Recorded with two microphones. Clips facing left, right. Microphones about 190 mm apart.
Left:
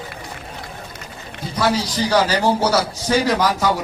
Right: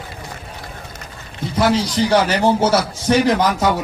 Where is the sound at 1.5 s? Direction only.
25° right (ahead or behind).